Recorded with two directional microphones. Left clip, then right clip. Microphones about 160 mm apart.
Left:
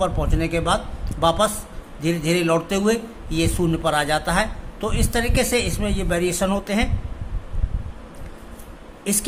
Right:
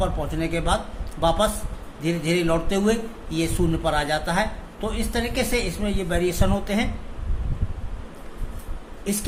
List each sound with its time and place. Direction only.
0.0 s speech: 20° left (ahead or behind)
9.1 s speech: 30° left (ahead or behind)